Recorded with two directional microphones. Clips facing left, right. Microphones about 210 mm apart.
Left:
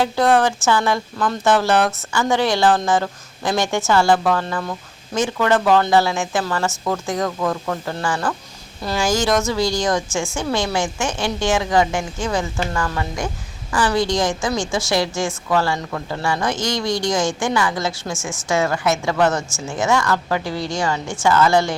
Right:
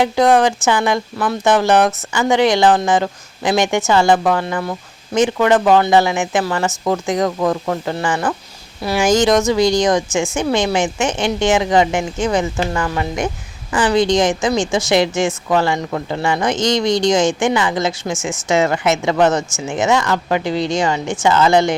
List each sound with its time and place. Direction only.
0.0 s a woman's voice: 15° right (ahead or behind)